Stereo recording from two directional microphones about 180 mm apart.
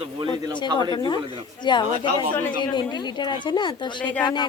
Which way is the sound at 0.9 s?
25° left (ahead or behind).